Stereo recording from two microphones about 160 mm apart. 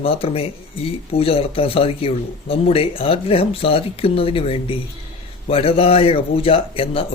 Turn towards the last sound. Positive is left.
turn(degrees=35)  # may be behind; listen again after turning